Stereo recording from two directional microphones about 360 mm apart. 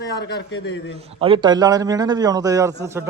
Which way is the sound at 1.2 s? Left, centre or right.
Centre.